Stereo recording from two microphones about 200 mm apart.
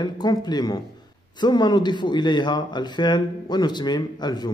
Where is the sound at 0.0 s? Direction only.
20° left (ahead or behind).